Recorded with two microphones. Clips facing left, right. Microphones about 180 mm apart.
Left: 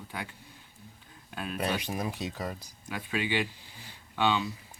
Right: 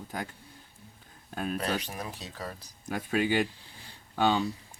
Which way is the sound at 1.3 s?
40° right (ahead or behind).